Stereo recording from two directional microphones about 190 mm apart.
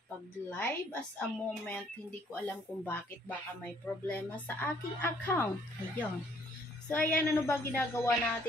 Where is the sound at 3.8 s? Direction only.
10° left (ahead or behind).